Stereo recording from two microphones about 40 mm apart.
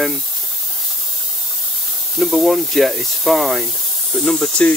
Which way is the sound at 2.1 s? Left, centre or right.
Centre.